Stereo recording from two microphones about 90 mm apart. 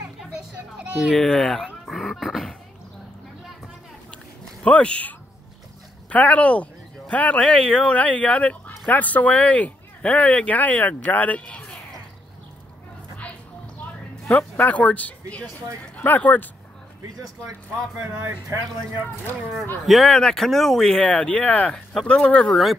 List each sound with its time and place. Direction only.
0.3 s children playing: 10° right (ahead or behind)
1.1 s speech: centre (ahead or behind)
4.6 s speech: 15° left (ahead or behind)
13.7 s a sound: 20° left (ahead or behind)
15.8 s speech: 15° left (ahead or behind)
18.0 s speech: 30° right (ahead or behind)
19.9 s speech: 5° left (ahead or behind)